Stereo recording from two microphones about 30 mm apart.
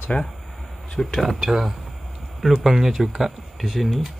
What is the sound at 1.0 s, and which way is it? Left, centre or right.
Speech, centre.